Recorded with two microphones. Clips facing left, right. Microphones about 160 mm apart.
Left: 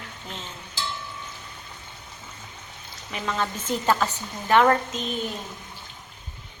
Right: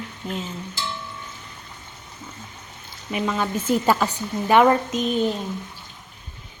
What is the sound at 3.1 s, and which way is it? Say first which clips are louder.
Speech: right 4 dB; 10° right (ahead or behind).